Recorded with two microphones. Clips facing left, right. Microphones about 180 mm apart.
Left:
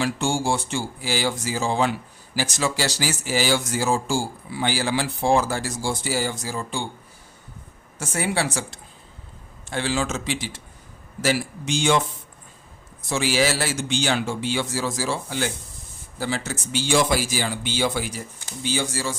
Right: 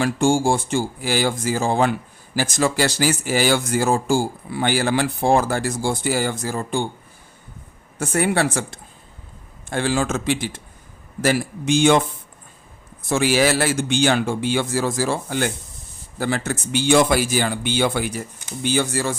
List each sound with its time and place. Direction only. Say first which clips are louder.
0.0 s speech: right 6 dB; 50° right (ahead or behind)
7.9 s a man's voice: right 5 dB; 60° right (ahead or behind)
13.1 s a man's voice: right 4 dB; 55° right (ahead or behind)